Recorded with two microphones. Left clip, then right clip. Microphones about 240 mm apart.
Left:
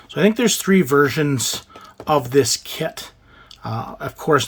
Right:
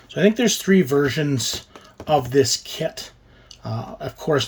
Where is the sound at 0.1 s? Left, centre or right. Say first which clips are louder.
Left 1 dB; centre.